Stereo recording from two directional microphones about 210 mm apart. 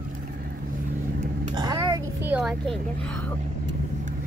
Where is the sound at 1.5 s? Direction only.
20° right (ahead or behind); by 3.2 s centre (ahead or behind).